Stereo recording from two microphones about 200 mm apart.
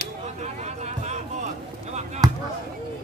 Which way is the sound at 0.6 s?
35° right (ahead or behind).